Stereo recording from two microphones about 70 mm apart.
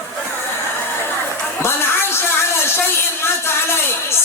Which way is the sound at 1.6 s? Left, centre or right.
Left.